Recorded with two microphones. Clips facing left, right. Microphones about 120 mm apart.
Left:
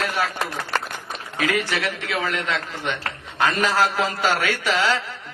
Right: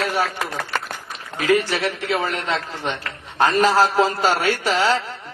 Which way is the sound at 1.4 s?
35° right (ahead or behind).